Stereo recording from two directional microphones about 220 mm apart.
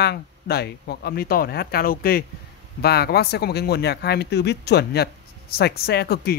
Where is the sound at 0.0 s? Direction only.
45° left (ahead or behind).